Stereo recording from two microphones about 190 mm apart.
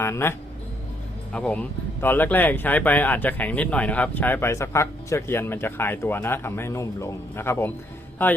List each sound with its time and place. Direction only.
0.0 s speech: 15° left (ahead or behind)